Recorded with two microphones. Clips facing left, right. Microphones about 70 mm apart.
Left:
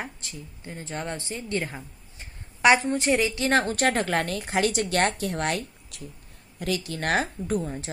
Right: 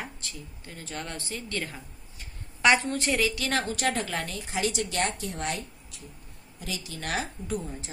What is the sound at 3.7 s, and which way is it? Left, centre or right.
A woman's voice, left.